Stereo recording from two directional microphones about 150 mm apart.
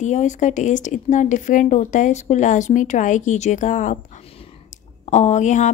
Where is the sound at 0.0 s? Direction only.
50° left (ahead or behind).